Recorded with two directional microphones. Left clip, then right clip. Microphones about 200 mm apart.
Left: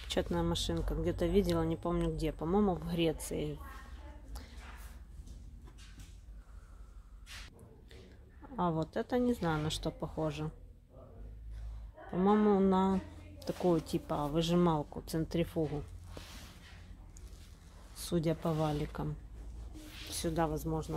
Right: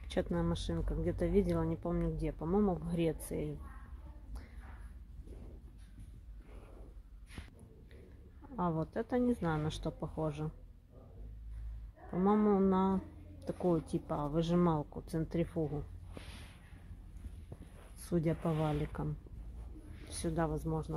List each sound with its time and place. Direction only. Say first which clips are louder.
0.1 s speech: left 2 dB; 5° left (ahead or behind)
8.5 s speech: left 2 dB; 5° left (ahead or behind)
12.1 s speech: left 2 dB; 5° left (ahead or behind)
16.2 s a sound: left 2 dB; 15° right (ahead or behind)
18.0 s speech: left 2 dB; 5° right (ahead or behind)